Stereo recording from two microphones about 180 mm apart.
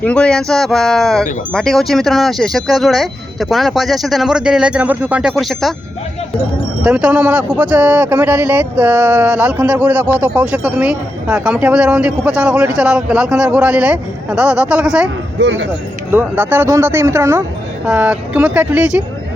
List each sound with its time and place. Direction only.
0.0 s speech: 5° left (ahead or behind)
6.8 s speech: 5° right (ahead or behind)
15.4 s speech: 80° right
16.1 s speech: 10° right (ahead or behind)